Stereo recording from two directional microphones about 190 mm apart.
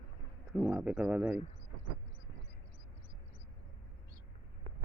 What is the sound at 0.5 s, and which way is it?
Speech, 5° right (ahead or behind).